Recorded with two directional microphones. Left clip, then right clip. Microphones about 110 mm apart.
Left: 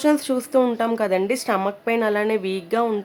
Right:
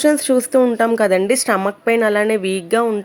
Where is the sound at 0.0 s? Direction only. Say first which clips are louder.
Right 5 dB; 45° right (ahead or behind).